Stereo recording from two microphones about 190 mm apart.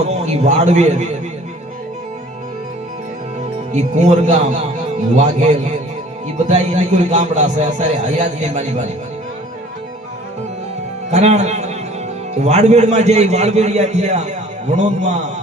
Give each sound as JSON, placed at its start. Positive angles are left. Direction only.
{"t": 0.0, "sound": "a man's voice", "side_deg": -35}
{"t": 3.7, "sound": "a man's voice", "side_deg": -35}
{"t": 11.1, "sound": "a man's voice", "side_deg": -35}